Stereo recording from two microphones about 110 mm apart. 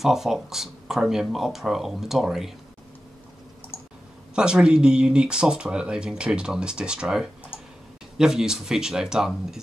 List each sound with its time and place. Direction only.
0.0 s speech: 5° right (ahead or behind)
3.7 s a sound: 15° left (ahead or behind)
4.4 s speech: 10° right (ahead or behind)